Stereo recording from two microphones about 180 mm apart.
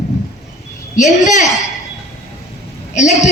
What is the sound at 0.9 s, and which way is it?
Speech, 40° left (ahead or behind).